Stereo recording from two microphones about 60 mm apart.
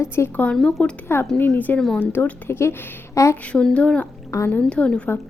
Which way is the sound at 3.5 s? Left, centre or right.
Centre.